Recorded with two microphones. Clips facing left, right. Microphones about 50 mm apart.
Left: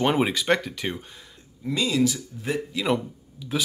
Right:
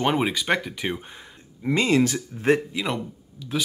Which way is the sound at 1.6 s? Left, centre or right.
Right.